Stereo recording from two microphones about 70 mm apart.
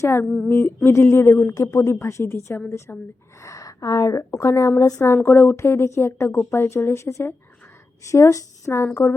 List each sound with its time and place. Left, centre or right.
0.0 s a woman's voice: left
0.3 s a woman's voice: centre
0.9 s a woman's voice: left
3.4 s a woman's voice: left
5.1 s a woman's voice: left